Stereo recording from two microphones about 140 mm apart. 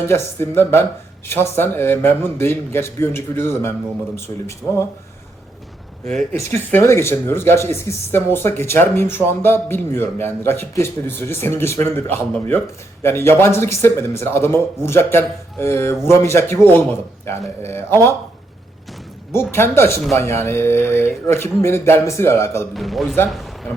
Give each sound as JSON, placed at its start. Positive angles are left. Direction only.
{"t": 0.1, "sound": "speech", "side_deg": 15}
{"t": 6.3, "sound": "speech", "side_deg": 15}
{"t": 19.3, "sound": "a man's voice", "side_deg": 15}
{"t": 22.7, "sound": "a man's voice", "side_deg": 0}
{"t": 23.3, "sound": "a sound", "side_deg": 0}